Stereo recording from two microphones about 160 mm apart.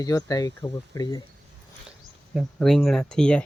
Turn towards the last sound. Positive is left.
turn(degrees=5)  # may be behind; listen again after turning